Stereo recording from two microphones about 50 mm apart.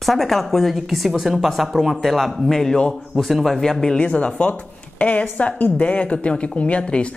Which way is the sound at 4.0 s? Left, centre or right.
Left.